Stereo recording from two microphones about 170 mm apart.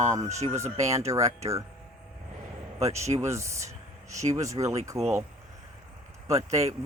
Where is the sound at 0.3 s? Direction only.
40° right (ahead or behind).